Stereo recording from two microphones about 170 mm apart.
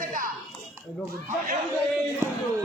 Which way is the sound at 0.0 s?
50° right (ahead or behind).